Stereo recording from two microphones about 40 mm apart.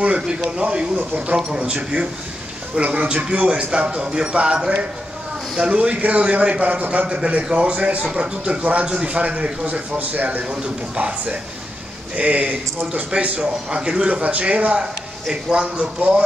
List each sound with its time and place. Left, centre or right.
0.0 s a man's voice: right
10.5 s speech: right
12.2 s a man's voice: right
14.0 s a man's voice: right